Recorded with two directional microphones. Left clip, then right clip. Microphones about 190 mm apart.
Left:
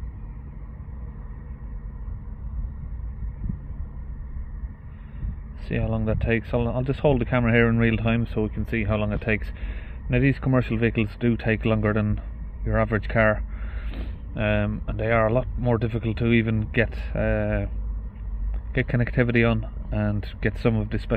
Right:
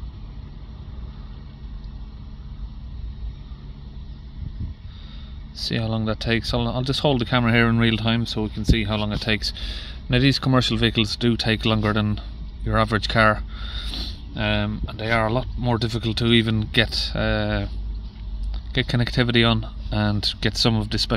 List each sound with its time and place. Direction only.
5.7 s speech: 25° right (ahead or behind)
18.7 s speech: 20° right (ahead or behind)